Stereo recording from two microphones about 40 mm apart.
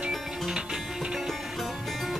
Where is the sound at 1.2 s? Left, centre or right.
Centre.